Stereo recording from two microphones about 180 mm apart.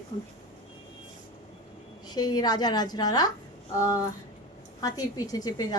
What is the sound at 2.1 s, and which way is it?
A woman's voice, 20° left (ahead or behind).